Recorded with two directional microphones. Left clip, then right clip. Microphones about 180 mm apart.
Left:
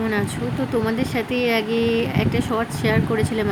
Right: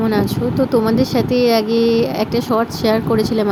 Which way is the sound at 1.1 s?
15° right (ahead or behind).